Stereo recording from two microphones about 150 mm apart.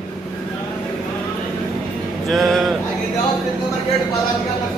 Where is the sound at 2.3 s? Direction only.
Centre (ahead or behind).